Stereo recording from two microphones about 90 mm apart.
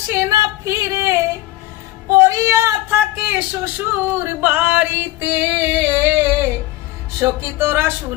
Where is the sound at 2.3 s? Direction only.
35° right (ahead or behind).